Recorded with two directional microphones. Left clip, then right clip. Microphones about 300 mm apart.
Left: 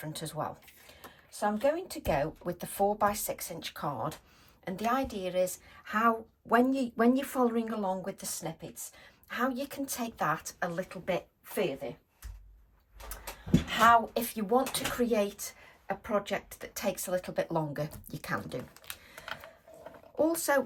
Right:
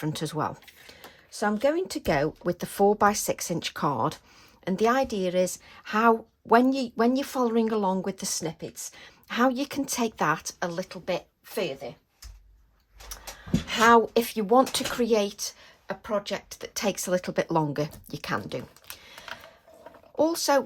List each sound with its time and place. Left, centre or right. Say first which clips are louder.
0.0 s speech: right 7 dB; right
1.5 s a woman's voice: right 5 dB; right
13.7 s speech: right 4 dB; right
14.1 s a woman's voice: right 7 dB; centre
19.1 s a sound: right 2 dB; centre
20.5 s a woman's voice: right 5 dB; centre